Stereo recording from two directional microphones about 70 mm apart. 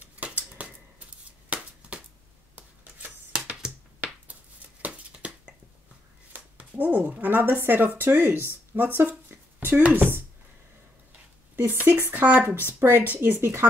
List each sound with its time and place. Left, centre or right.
0.0 s a sound: right
6.3 s speech: right
11.5 s speech: right